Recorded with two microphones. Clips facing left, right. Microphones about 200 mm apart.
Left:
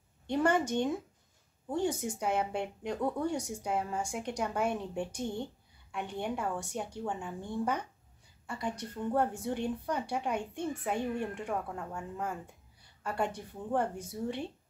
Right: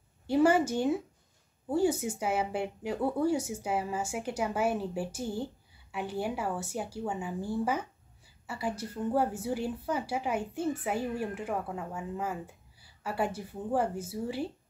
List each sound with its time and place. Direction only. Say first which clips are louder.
0.3 s a woman's voice: right 4 dB; 5° right (ahead or behind)